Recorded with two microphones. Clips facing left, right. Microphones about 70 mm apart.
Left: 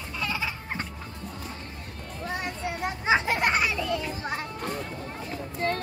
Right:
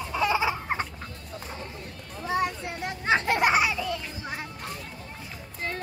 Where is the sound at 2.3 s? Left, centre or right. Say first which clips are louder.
Right 4 dB; centre.